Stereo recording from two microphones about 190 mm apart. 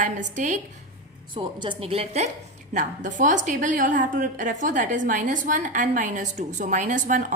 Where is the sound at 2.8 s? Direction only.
40° right (ahead or behind).